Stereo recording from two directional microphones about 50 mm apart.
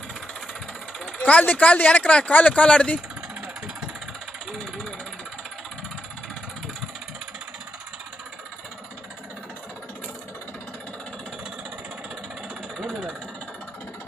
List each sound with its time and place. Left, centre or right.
1.1 s speech: left